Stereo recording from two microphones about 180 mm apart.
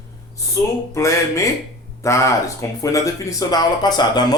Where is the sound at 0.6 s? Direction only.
20° left (ahead or behind).